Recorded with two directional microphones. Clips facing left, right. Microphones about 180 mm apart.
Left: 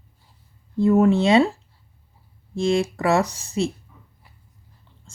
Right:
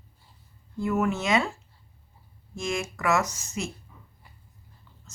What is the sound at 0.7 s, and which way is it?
A woman's voice, 35° left (ahead or behind).